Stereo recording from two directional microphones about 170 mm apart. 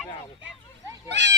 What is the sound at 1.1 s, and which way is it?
Children playing, 90° right.